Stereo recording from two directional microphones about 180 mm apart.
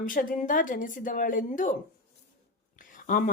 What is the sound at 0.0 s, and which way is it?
Speech, 50° left (ahead or behind).